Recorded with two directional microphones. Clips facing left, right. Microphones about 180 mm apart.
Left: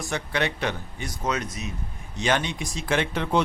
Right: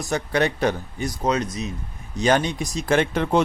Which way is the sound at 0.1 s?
40° right (ahead or behind).